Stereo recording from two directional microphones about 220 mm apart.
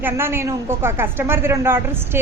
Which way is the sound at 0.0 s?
10° right (ahead or behind).